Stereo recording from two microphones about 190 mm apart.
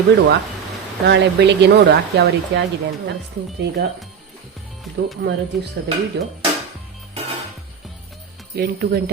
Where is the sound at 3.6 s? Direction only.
60° right (ahead or behind).